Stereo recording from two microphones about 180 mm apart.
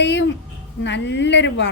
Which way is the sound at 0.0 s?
80° left.